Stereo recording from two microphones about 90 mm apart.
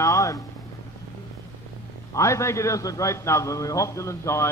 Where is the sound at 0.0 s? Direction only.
40° left (ahead or behind).